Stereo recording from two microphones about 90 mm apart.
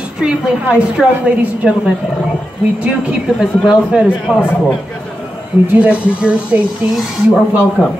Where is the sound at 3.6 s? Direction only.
5° right (ahead or behind).